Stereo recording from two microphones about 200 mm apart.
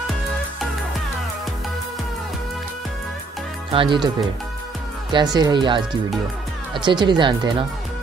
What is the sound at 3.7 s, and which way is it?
Speech, 25° right (ahead or behind).